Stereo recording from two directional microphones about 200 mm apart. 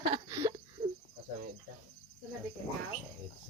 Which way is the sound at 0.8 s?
40° right (ahead or behind).